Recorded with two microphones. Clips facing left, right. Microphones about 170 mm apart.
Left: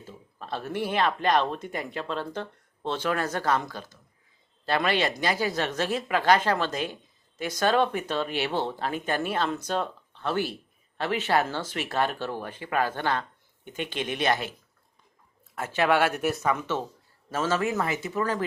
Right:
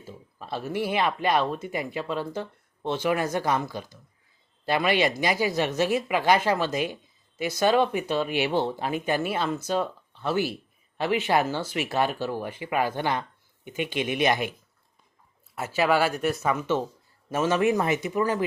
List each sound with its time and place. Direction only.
0.0 s speech: 10° right (ahead or behind)
15.5 s speech: 5° right (ahead or behind)